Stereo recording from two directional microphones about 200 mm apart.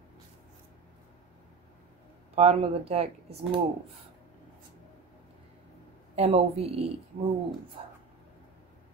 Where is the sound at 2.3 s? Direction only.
30° right (ahead or behind).